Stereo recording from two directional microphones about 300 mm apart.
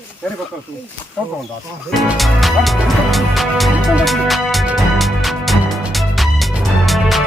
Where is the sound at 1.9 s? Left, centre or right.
Centre.